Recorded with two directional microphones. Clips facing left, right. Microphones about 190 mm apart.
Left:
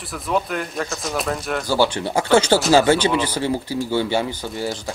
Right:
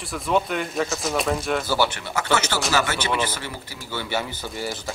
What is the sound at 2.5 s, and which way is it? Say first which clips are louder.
Speech: left 10 dB; 40° left (ahead or behind).